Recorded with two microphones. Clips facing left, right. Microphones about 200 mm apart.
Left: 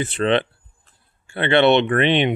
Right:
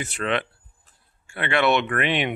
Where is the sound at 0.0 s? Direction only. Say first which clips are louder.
Left 7 dB; 30° left (ahead or behind).